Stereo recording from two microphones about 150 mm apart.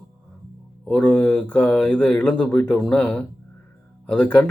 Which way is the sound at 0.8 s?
5° left (ahead or behind).